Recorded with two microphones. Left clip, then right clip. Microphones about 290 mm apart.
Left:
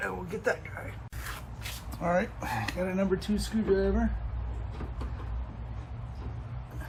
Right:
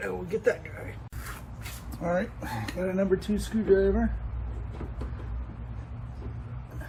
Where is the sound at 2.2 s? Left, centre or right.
Centre.